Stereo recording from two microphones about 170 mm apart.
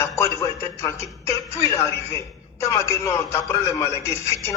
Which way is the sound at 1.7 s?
15° left (ahead or behind).